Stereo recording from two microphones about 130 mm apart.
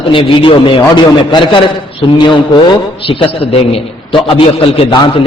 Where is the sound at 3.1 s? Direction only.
40° left (ahead or behind).